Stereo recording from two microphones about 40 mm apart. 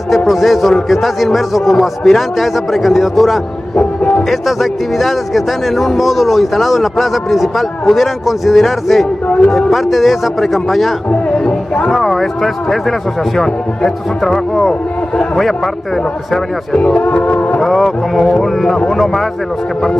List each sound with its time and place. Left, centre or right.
0.3 s speech: centre
3.7 s music: left
4.3 s speech: centre
11.1 s music: left
11.9 s a man's voice: centre
16.7 s speech: left
17.0 s music: left
17.6 s a man's voice: centre